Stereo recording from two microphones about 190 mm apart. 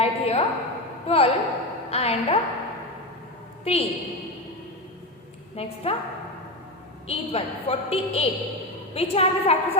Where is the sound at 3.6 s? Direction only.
30° left (ahead or behind).